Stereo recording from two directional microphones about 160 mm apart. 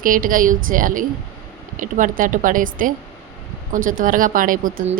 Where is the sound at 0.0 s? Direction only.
60° right (ahead or behind).